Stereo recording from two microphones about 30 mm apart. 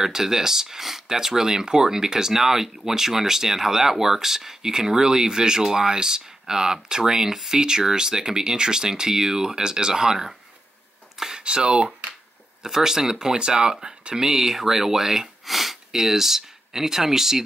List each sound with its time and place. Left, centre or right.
0.0 s speech: centre
11.3 s speech: right
12.6 s speech: centre
14.1 s speech: centre
15.4 s sniff: centre
15.9 s speech: centre